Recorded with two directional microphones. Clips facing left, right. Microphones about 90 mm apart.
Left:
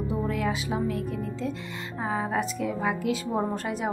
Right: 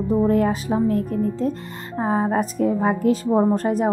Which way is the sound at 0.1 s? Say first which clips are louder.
Right 12 dB; 40° right (ahead or behind).